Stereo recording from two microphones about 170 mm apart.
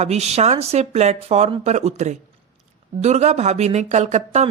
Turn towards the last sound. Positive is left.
turn(degrees=-45)  # may be behind; listen again after turning